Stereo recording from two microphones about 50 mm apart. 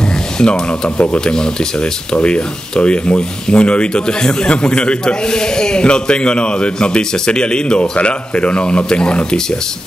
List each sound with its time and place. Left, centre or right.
0.4 s speech: centre